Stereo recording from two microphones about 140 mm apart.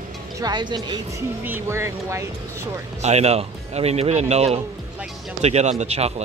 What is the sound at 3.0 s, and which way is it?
Speech, 50° right (ahead or behind).